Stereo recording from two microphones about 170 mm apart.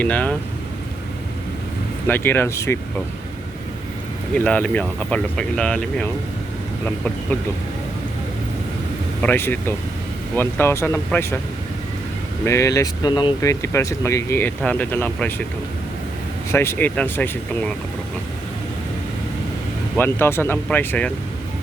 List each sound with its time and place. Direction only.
0.0 s speech: 10° left (ahead or behind)
2.0 s speech: 10° left (ahead or behind)
4.4 s speech: 5° left (ahead or behind)
9.2 s speech: 10° left (ahead or behind)
12.5 s speech: 15° left (ahead or behind)
16.5 s speech: 15° left (ahead or behind)
20.0 s speech: 15° left (ahead or behind)